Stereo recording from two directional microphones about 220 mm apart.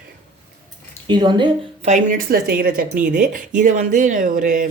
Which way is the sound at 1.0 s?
20° right (ahead or behind).